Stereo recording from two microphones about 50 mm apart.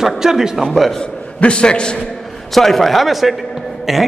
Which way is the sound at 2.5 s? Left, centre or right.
Centre.